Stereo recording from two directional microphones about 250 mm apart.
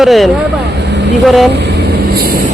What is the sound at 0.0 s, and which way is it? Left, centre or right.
Speech, centre.